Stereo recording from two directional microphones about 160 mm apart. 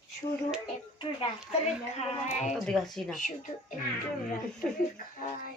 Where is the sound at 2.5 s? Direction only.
Centre (ahead or behind).